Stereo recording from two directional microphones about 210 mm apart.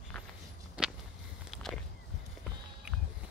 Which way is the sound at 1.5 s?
Centre (ahead or behind).